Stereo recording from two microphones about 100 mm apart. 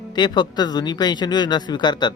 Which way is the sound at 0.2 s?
45° left (ahead or behind).